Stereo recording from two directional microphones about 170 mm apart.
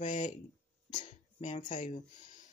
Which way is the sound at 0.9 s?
50° left (ahead or behind).